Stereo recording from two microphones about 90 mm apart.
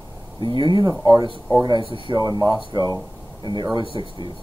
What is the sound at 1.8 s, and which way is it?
Speech, 75° right (ahead or behind).